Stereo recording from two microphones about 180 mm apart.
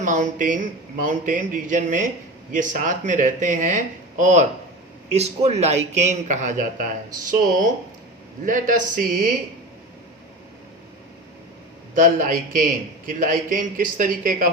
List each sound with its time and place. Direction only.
0.0 s a man's voice: 45° right (ahead or behind)
11.9 s speech: 50° right (ahead or behind)